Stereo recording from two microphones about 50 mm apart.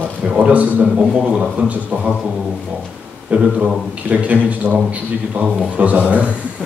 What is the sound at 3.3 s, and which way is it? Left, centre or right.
A man's voice, right.